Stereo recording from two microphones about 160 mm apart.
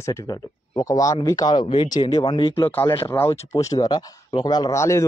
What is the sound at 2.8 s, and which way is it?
Speech, 35° left (ahead or behind).